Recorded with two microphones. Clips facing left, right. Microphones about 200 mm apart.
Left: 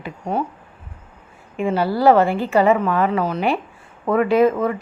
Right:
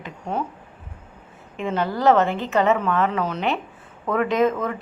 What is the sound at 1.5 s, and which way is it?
A woman's voice, 10° left (ahead or behind).